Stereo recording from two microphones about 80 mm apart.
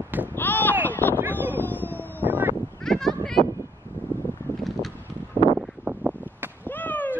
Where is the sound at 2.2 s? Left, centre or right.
Right.